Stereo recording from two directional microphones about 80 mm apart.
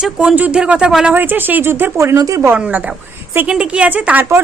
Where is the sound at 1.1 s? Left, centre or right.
Right.